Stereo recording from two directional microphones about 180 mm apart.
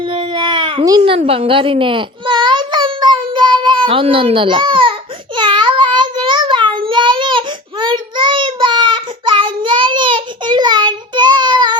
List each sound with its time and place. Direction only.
0.0 s baby cry: 30° right (ahead or behind)
5.4 s child singing: 25° right (ahead or behind)